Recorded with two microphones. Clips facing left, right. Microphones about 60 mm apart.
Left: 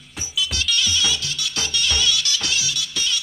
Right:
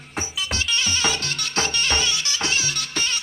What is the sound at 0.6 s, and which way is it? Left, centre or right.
Music, right.